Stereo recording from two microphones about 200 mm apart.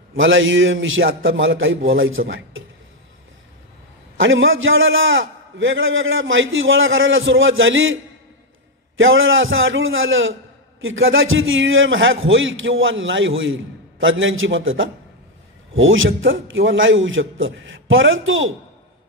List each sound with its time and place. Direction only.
0.1 s a man's voice: 75° right (ahead or behind)
4.2 s a man's voice: 75° right (ahead or behind)